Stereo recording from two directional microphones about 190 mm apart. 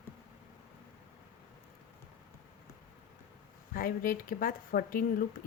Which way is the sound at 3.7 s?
50° left (ahead or behind).